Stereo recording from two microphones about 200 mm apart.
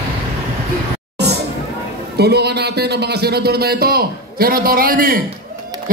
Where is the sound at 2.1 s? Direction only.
55° right (ahead or behind).